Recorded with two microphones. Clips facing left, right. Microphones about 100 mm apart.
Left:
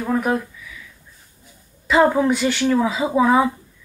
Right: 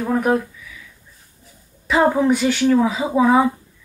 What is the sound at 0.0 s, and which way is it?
Speech, 10° right (ahead or behind).